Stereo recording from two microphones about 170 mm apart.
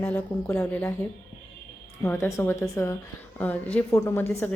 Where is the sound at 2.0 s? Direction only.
10° left (ahead or behind).